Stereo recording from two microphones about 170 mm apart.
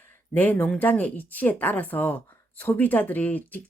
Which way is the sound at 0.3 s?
10° left (ahead or behind).